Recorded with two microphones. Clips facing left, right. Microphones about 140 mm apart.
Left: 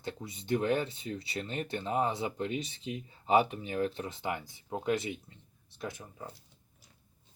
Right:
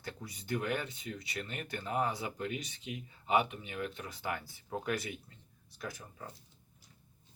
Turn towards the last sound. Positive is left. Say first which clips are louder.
# left 3 dB
turn(degrees=20)  # may be behind; listen again after turning